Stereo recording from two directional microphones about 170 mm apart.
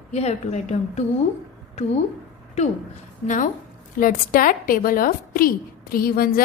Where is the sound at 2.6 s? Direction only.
40° left (ahead or behind).